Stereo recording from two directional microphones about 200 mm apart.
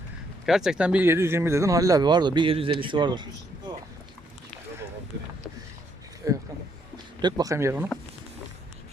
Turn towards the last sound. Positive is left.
turn(degrees=-10)  # may be behind; listen again after turning